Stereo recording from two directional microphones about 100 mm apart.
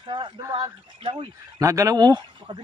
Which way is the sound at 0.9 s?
65° right (ahead or behind).